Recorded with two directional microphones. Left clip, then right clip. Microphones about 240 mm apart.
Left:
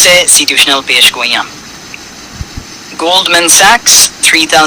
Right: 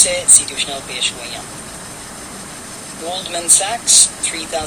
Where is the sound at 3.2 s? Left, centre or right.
Left.